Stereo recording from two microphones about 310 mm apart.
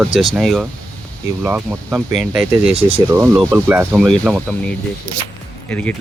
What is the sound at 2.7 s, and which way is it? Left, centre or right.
Speech, centre.